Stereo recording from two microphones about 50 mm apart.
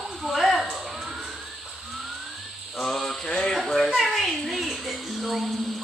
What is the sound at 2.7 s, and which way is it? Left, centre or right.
Mantra, centre.